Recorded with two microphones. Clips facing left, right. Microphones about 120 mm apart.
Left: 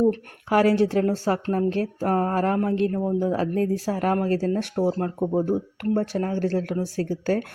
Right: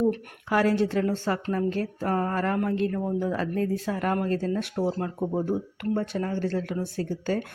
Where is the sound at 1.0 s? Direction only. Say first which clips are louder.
Left 4 dB; 40° left (ahead or behind).